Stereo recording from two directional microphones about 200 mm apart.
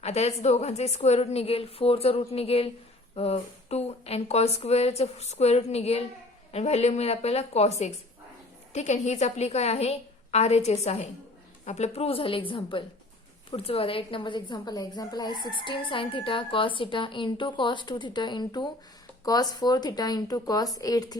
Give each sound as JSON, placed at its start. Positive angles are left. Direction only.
{"t": 0.0, "sound": "a woman's voice", "side_deg": 30}